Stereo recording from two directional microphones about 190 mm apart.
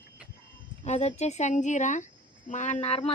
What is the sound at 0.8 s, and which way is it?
Speech, 35° left (ahead or behind).